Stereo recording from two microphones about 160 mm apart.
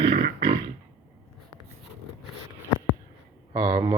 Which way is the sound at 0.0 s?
40° right (ahead or behind).